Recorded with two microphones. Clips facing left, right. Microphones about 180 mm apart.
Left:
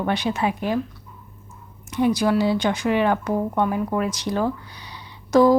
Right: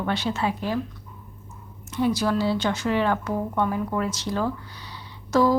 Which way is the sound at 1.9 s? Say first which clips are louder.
Left 3 dB; 15° left (ahead or behind).